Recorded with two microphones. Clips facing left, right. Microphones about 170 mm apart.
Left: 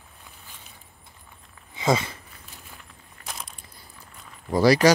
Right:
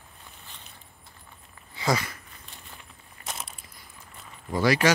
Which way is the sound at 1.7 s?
20° left (ahead or behind).